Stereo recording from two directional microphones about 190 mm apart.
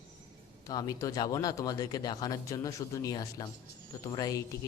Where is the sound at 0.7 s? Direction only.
20° left (ahead or behind).